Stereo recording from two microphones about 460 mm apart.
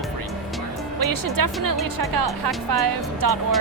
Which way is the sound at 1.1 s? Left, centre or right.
Right.